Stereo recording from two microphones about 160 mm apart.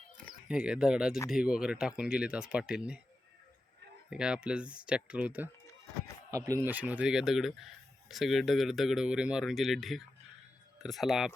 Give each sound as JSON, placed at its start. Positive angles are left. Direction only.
{"t": 0.4, "sound": "speech", "side_deg": -5}
{"t": 4.1, "sound": "speech", "side_deg": -5}